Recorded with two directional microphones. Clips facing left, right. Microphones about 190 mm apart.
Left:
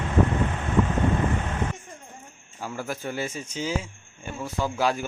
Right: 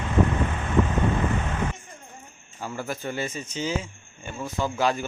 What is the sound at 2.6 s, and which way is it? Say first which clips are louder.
Speech: even; 5° left (ahead or behind).